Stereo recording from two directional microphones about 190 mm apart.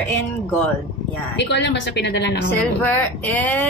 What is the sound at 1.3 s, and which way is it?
A woman's voice, 65° left (ahead or behind).